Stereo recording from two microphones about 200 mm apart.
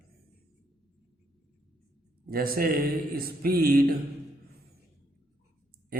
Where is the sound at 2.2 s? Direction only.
50° right (ahead or behind).